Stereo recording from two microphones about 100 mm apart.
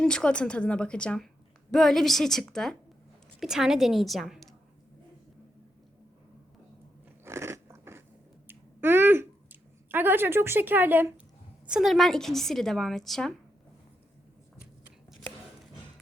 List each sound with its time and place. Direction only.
0.0 s a woman's voice: 5° left (ahead or behind)
7.3 s biting: 25° right (ahead or behind)
8.4 s a sound: 25° right (ahead or behind)
11.6 s a woman's voice: 5° right (ahead or behind)